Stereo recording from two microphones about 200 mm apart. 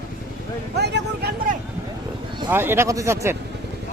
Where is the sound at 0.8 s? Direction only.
55° right (ahead or behind).